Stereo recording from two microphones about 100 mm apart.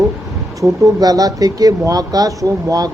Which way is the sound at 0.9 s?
40° right (ahead or behind).